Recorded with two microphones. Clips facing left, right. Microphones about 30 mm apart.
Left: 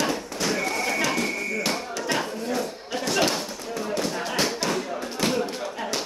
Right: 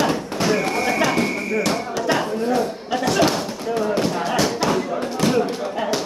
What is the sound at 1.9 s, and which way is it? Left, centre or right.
Chop, centre.